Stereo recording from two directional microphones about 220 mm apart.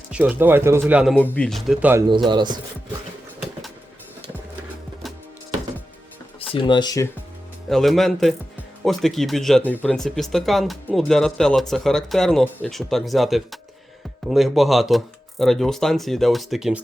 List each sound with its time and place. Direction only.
0.1 s speech: 5° right (ahead or behind)
1.1 s speech: 5° left (ahead or behind); by 2.0 s 10° right (ahead or behind)
2.3 s chopping: 20° right (ahead or behind)
6.5 s speech: 20° left (ahead or behind)
7.7 s speech: centre (ahead or behind)